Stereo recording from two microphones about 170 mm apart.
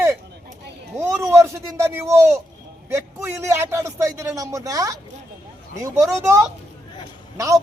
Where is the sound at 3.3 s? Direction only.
15° right (ahead or behind).